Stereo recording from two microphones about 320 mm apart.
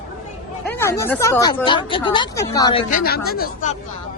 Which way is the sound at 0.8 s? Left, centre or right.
Centre.